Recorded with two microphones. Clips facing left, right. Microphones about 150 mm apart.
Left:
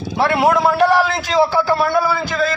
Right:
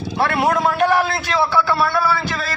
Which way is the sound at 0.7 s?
35° left (ahead or behind).